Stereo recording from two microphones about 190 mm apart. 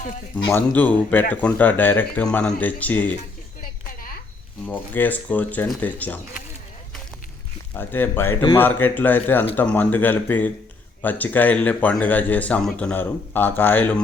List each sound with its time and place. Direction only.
0.5 s speech: 10° left (ahead or behind)
3.6 s a sound: 50° left (ahead or behind)
4.6 s speech: 10° left (ahead or behind)
7.7 s speech: 10° left (ahead or behind)